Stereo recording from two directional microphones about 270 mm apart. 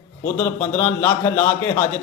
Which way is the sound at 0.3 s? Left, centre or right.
Centre.